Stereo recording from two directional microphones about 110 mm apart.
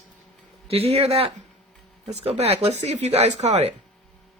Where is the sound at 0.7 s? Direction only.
65° right (ahead or behind).